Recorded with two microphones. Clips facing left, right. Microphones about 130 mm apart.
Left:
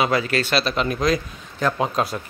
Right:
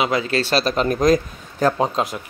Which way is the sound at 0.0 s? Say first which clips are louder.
Even; 20° right (ahead or behind).